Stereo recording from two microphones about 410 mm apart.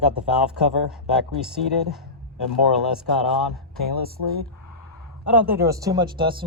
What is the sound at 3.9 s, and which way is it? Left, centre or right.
Speech, right.